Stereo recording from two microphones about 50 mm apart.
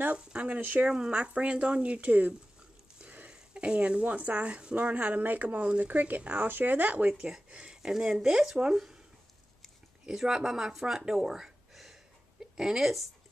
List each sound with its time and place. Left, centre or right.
0.3 s speech: right
0.6 s speech: right
0.8 s speech: centre
3.0 s a sound: right
3.3 s speech: centre
7.2 s speech: centre
10.0 s a woman's voice: centre